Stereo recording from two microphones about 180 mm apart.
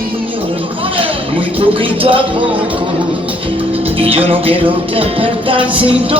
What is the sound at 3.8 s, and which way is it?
Music, 30° right (ahead or behind).